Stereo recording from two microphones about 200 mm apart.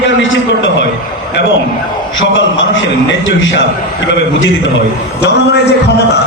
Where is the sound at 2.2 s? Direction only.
70° left (ahead or behind).